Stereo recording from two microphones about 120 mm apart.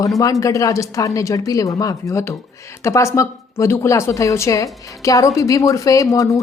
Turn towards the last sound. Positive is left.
turn(degrees=25)  # may be behind; listen again after turning